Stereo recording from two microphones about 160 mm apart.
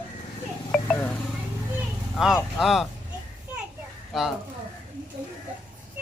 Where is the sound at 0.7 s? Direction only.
5° left (ahead or behind).